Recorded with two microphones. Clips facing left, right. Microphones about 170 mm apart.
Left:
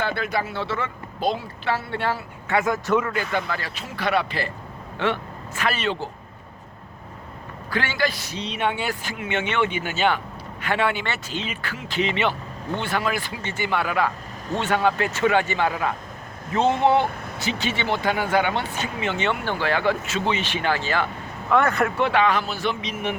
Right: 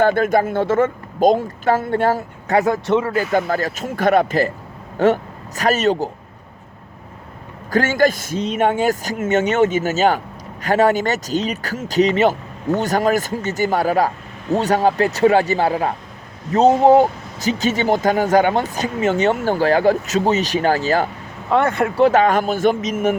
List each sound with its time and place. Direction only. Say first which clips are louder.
0.0 s a woman's voice: right 10 dB; 45° right (ahead or behind)
2.8 s speech: right 4 dB; 25° right (ahead or behind)
3.1 s a woman's voice: right 8 dB; 40° right (ahead or behind)
7.7 s a woman's voice: right 9 dB; 45° right (ahead or behind)
21.5 s a woman's voice: right 3 dB; 25° right (ahead or behind); by 23.1 s 45° right (ahead or behind)